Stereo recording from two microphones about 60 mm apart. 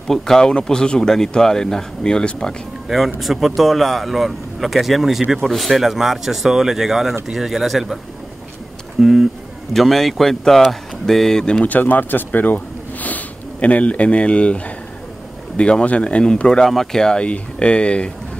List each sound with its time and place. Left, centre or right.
0.1 s speech: centre
2.9 s speech: centre
9.0 s speech: centre
11.6 s speech: left